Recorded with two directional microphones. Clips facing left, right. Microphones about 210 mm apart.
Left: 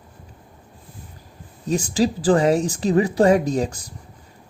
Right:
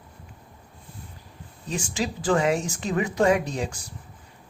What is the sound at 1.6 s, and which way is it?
Speech, 40° left (ahead or behind).